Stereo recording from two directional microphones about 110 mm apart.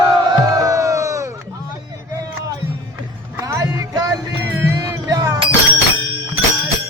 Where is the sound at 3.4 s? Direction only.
30° right (ahead or behind).